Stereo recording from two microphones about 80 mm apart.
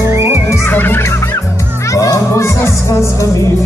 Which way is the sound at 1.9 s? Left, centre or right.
Left.